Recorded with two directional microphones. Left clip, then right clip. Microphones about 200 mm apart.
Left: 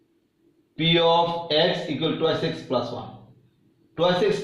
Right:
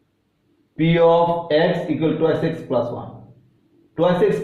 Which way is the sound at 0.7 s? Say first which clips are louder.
Right 4 dB; 15° left (ahead or behind).